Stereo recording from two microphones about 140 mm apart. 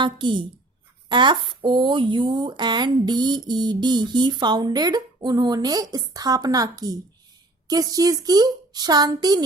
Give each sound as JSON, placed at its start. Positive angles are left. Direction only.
{"t": 0.0, "sound": "a woman's voice", "side_deg": -35}